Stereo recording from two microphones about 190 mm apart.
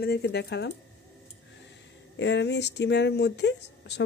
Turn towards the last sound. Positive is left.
turn(degrees=65)  # may be behind; listen again after turning